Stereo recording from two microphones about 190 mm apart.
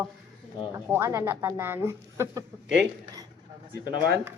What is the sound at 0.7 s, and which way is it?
Speech, 15° right (ahead or behind).